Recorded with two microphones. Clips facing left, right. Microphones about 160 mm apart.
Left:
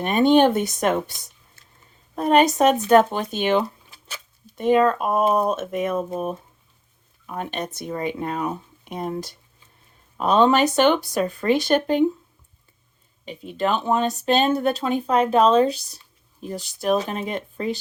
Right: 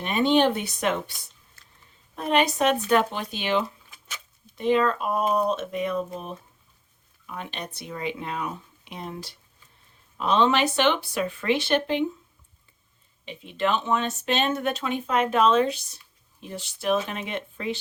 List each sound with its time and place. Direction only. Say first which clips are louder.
0.0 s speech: left 5 dB; 50° left (ahead or behind)
1.6 s a sound: left 1 dB; 25° left (ahead or behind)
2.1 s speech: left 6 dB; 45° left (ahead or behind)
3.9 s a sound: left 2 dB; 35° left (ahead or behind)
4.5 s speech: left 4 dB; 50° left (ahead or behind)
7.3 s speech: left 7 dB; 45° left (ahead or behind)
13.2 s speech: left 2 dB; 40° left (ahead or behind)